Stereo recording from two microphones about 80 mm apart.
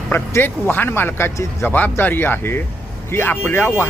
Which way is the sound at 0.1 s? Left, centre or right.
Left.